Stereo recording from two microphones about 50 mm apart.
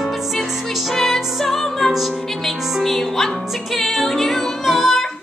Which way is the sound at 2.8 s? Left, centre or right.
Centre.